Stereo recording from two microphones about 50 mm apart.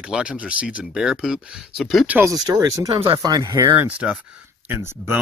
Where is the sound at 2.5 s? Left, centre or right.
Right.